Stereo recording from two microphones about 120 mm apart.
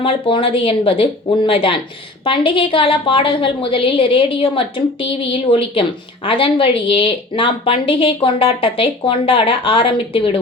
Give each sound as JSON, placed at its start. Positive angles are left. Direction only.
{"t": 0.0, "sound": "speech", "side_deg": 50}